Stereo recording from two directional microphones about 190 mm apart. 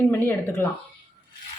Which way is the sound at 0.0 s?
10° left (ahead or behind).